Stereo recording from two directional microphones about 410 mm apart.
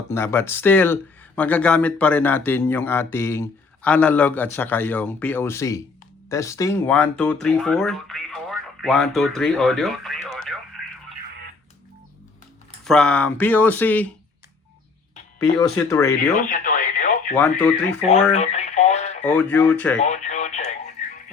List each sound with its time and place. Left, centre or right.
0.1 s speech: centre
10.8 s radio: centre
12.8 s speech: centre
15.9 s speech: centre
16.4 s radio: centre
17.3 s speech: centre
18.0 s radio: centre
19.2 s speech: centre
20.0 s radio: centre